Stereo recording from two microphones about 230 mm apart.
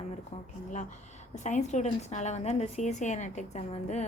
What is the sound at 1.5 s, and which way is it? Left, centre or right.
A woman's voice, left.